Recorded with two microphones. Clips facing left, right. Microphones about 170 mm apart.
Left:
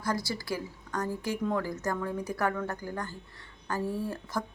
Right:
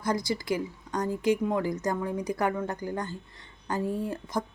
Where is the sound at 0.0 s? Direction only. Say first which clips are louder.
Right 4 dB; 20° right (ahead or behind).